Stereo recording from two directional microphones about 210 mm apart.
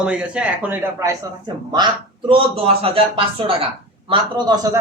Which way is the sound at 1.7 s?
20° right (ahead or behind).